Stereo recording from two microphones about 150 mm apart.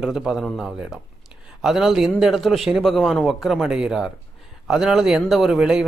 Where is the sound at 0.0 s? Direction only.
5° right (ahead or behind).